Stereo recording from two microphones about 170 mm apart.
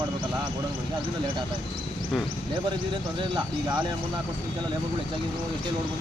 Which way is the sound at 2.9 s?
25° right (ahead or behind).